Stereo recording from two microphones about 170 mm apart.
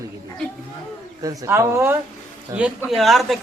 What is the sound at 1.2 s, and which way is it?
Speech, 20° right (ahead or behind).